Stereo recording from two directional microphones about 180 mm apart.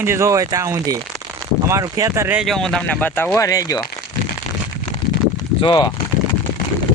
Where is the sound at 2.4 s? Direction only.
Centre (ahead or behind); by 3.9 s 20° left (ahead or behind).